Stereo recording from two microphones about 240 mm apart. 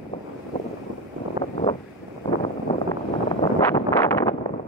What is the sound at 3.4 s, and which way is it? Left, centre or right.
Wind noise, centre.